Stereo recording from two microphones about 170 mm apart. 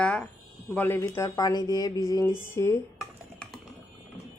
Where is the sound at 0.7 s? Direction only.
10° left (ahead or behind).